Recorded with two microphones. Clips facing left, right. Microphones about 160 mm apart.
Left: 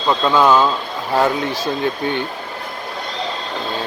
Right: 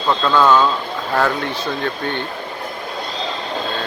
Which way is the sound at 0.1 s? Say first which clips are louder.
Left 1 dB; 15° left (ahead or behind).